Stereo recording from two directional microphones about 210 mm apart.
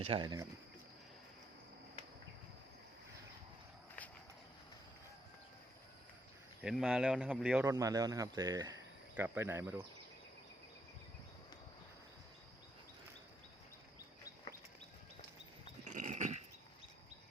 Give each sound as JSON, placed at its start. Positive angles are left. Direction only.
{"t": 0.0, "sound": "speech", "side_deg": -25}
{"t": 6.6, "sound": "speech", "side_deg": -5}
{"t": 15.8, "sound": "dog", "side_deg": -35}